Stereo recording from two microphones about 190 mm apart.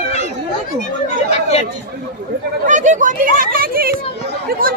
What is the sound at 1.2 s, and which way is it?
Speech, 35° left (ahead or behind).